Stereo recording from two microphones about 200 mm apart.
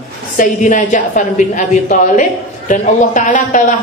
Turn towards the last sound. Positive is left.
turn(degrees=40)  # may be behind; listen again after turning